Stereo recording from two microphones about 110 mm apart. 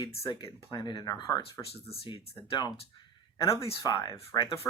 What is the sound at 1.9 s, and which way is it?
Speech, 60° left (ahead or behind).